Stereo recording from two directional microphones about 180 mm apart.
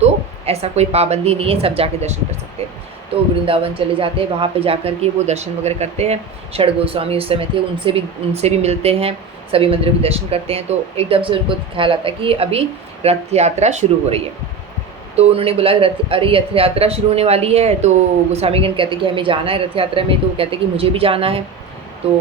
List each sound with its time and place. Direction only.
0.0 s speech: 35° right (ahead or behind)
3.4 s speech: 30° right (ahead or behind)